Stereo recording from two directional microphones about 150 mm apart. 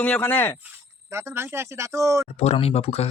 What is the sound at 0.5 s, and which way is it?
Speech, 15° right (ahead or behind).